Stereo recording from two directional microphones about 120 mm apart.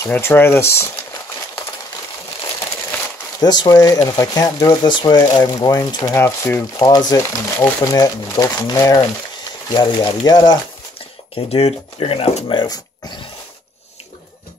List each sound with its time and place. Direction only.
0.1 s speech: 20° left (ahead or behind)
3.3 s speech: 35° left (ahead or behind)
6.1 s speech: 20° left (ahead or behind)
6.9 s speech: 35° left (ahead or behind)
11.3 s speech: 60° left (ahead or behind)
12.5 s speech: 35° left (ahead or behind)